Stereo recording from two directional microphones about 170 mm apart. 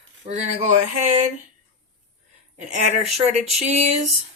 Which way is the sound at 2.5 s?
45° right (ahead or behind).